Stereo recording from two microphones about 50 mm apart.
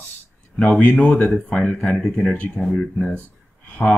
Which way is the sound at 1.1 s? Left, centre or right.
Centre.